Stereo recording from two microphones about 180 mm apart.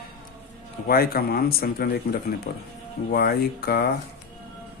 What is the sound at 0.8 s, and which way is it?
Speech, 55° left (ahead or behind).